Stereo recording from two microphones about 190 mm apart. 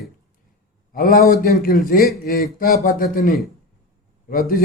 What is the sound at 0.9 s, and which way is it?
Speech, 50° left (ahead or behind).